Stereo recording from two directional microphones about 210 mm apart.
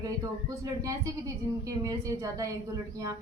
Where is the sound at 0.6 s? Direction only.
15° right (ahead or behind).